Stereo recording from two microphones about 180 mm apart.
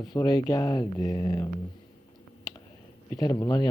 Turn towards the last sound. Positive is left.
turn(degrees=20)  # may be behind; listen again after turning